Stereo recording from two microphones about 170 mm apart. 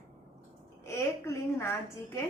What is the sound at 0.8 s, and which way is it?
A woman's voice, 15° left (ahead or behind).